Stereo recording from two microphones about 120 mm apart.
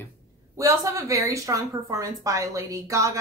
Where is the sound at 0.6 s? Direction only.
25° right (ahead or behind).